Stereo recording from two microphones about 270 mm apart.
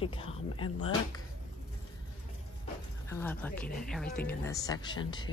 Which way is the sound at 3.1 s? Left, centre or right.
Centre.